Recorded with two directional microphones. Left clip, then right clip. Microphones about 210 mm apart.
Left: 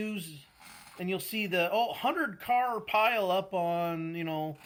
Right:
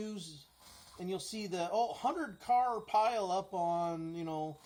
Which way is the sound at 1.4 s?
30° left (ahead or behind).